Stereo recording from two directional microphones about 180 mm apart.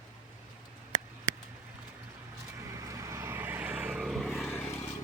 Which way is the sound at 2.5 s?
15° right (ahead or behind).